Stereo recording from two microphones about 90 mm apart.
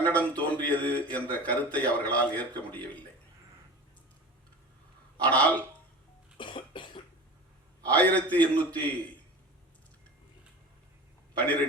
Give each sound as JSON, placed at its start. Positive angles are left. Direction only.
{"t": 0.0, "sound": "a man's voice", "side_deg": 20}
{"t": 5.2, "sound": "a man's voice", "side_deg": 15}
{"t": 6.3, "sound": "cough", "side_deg": 65}
{"t": 7.9, "sound": "a man's voice", "side_deg": 15}
{"t": 11.3, "sound": "a man's voice", "side_deg": 15}